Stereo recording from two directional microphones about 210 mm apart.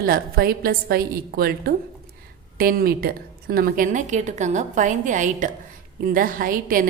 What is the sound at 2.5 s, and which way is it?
A woman's voice, 45° right (ahead or behind).